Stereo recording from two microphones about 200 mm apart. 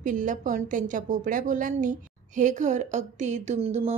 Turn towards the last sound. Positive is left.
turn(degrees=-30)  # may be behind; listen again after turning